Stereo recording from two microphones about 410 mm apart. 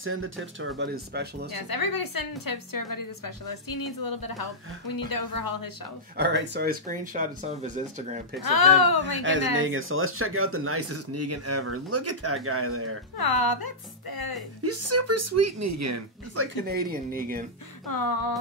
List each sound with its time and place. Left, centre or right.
0.0 s speech: right
1.5 s a woman's voice: left
6.1 s speech: right
8.5 s a woman's voice: left
9.6 s speech: right
13.2 s a woman's voice: left
14.6 s speech: right
16.6 s speech: right
17.8 s a woman's voice: left